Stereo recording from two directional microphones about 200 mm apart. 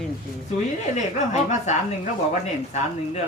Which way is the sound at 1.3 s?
35° left (ahead or behind).